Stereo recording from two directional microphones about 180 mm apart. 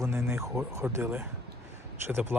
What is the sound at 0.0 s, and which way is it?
Speech, 15° right (ahead or behind).